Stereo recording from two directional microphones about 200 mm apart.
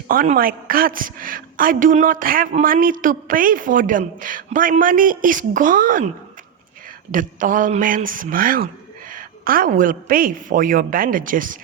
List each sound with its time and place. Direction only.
0.1 s a woman's voice: 45° right (ahead or behind)
7.1 s a woman's voice: 40° right (ahead or behind)